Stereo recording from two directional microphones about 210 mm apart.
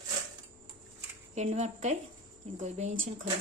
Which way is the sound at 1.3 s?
35° right (ahead or behind).